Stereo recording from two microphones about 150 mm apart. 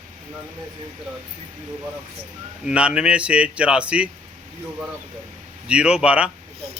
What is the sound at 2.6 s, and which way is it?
A man's voice, 5° right (ahead or behind).